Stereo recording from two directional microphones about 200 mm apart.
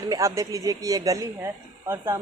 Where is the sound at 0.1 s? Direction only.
15° right (ahead or behind).